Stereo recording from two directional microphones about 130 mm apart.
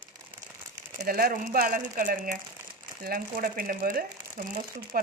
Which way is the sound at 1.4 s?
80° right.